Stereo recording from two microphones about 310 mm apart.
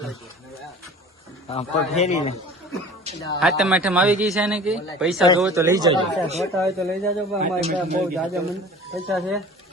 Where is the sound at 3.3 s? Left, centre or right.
Centre.